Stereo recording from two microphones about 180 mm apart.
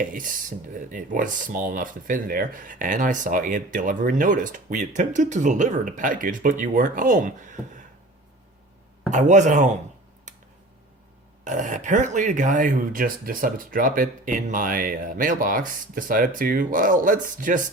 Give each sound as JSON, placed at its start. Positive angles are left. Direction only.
{"t": 0.0, "sound": "speech", "side_deg": -50}
{"t": 9.0, "sound": "speech", "side_deg": -45}
{"t": 11.4, "sound": "speech", "side_deg": -45}